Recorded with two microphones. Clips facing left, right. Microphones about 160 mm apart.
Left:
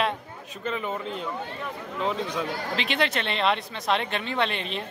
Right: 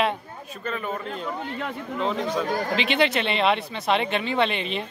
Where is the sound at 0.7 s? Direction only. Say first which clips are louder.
Even; 20° left (ahead or behind).